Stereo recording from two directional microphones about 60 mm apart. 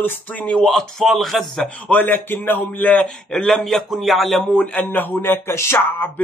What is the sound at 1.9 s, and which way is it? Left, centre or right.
Speech, left.